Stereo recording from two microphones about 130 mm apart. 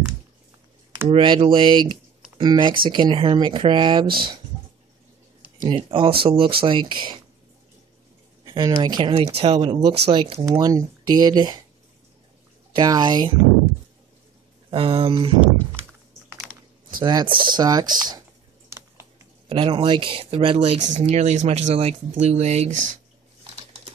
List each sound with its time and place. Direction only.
1.1 s speech: 40° right (ahead or behind)
5.6 s speech: 45° right (ahead or behind)
8.5 s a woman's voice: 30° right (ahead or behind)
9.1 s speech: 50° right (ahead or behind)
10.6 s speech: 30° right (ahead or behind)
12.7 s speech: 35° right (ahead or behind)
14.7 s speech: 45° right (ahead or behind)
17.0 s speech: 35° right (ahead or behind)
18.7 s typing: 20° right (ahead or behind)
19.5 s speech: 40° right (ahead or behind)
20.8 s speech: 60° right (ahead or behind)